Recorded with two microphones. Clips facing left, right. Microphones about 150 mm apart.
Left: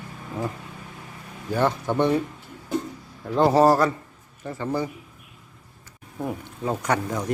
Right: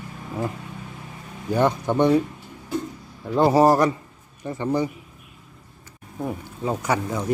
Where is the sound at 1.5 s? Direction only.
15° right (ahead or behind).